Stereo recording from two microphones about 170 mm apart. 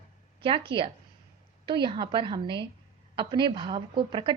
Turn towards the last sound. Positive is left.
turn(degrees=-30)  # may be behind; listen again after turning